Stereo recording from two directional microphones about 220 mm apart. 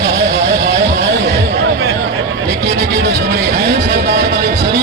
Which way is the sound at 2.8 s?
50° right (ahead or behind).